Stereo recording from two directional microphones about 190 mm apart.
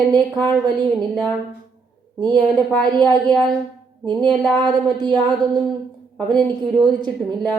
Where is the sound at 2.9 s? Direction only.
20° right (ahead or behind).